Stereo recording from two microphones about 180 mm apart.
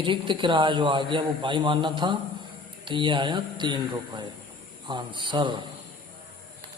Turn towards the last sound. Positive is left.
turn(degrees=-25)  # may be behind; listen again after turning